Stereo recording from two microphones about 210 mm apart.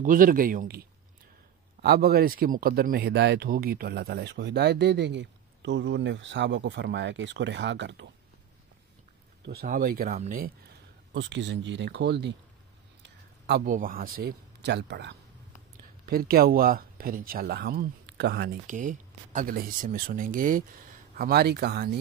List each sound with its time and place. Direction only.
0.0 s speech: 40° right (ahead or behind); by 8.1 s 60° right (ahead or behind)
9.4 s speech: 45° right (ahead or behind)
11.1 s a man's voice: 60° right (ahead or behind)